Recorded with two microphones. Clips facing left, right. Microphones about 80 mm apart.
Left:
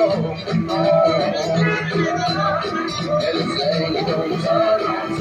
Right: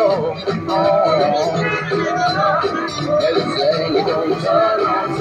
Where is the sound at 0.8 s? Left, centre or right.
Right.